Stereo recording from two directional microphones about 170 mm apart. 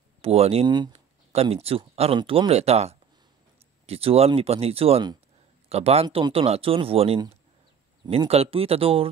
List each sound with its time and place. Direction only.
0.2 s speech: 35° right (ahead or behind)
0.7 s speech: 25° right (ahead or behind)
0.9 s speech: 35° right (ahead or behind)